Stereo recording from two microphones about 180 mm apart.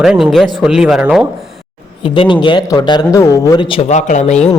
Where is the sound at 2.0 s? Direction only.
30° left (ahead or behind).